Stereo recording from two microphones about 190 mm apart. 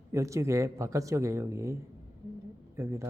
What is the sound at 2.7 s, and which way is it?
Speech, 15° right (ahead or behind).